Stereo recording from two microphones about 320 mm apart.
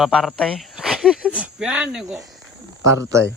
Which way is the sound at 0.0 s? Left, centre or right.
Centre.